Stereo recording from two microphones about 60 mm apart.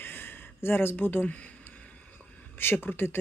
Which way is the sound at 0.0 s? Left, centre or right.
Left.